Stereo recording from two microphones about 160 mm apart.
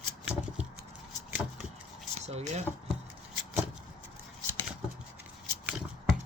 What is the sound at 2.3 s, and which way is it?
Speech, 45° right (ahead or behind).